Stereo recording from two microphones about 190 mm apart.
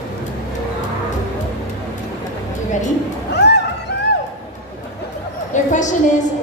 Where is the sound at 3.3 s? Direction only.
60° left (ahead or behind).